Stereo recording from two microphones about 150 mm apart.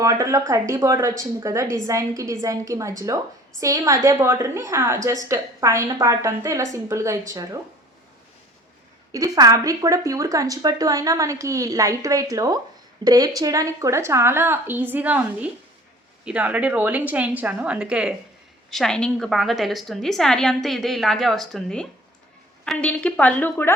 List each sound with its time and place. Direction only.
0.0 s a woman's voice: 20° right (ahead or behind)
9.1 s a woman's voice: 25° right (ahead or behind); by 23.7 s 10° left (ahead or behind)